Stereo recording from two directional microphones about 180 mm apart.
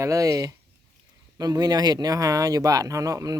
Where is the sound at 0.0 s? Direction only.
20° right (ahead or behind).